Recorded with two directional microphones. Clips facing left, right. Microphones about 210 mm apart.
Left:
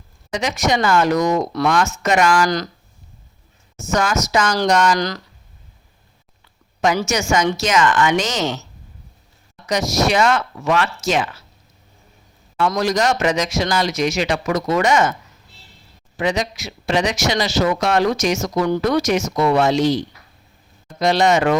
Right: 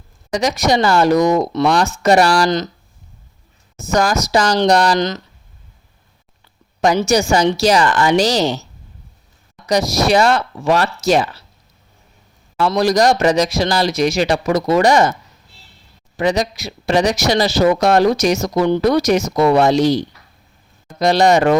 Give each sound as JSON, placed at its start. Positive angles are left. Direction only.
{"t": 0.3, "sound": "a woman's voice", "side_deg": -40}
{"t": 3.8, "sound": "a woman's voice", "side_deg": -35}
{"t": 4.9, "sound": "speech", "side_deg": -20}
{"t": 6.8, "sound": "a woman's voice", "side_deg": -35}
{"t": 9.6, "sound": "a woman's voice", "side_deg": -35}
{"t": 12.5, "sound": "a woman's voice", "side_deg": -35}
{"t": 16.1, "sound": "a woman's voice", "side_deg": -35}